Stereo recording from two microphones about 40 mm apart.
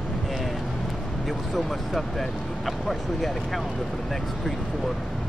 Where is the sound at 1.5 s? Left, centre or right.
Centre.